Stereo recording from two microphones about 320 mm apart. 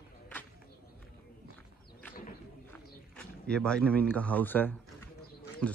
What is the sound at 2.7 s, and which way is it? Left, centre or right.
Speech, centre.